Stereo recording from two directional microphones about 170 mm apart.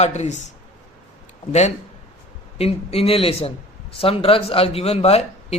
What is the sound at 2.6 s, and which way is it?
Speech, 35° left (ahead or behind).